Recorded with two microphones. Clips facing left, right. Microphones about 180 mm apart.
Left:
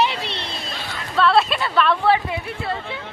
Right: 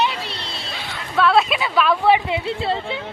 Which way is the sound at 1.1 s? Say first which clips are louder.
Right 1 dB; 5° right (ahead or behind).